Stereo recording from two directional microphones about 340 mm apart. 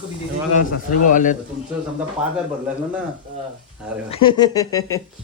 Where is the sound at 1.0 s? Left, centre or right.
Left.